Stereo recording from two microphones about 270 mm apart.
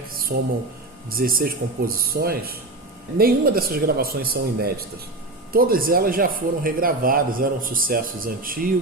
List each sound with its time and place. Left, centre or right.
0.3 s a man's voice: right